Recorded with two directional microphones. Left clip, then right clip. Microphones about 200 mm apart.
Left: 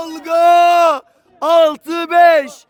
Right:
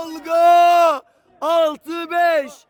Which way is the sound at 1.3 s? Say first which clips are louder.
Left 6 dB; 15° left (ahead or behind).